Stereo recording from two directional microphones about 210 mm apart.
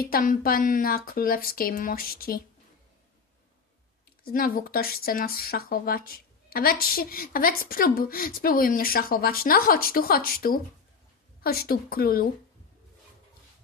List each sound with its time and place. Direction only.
0.0 s speech: 40° left (ahead or behind)
4.3 s speech: 45° left (ahead or behind)